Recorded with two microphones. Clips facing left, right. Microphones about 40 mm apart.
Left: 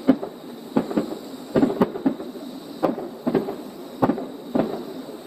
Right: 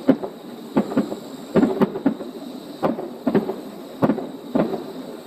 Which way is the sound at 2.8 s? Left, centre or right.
Centre.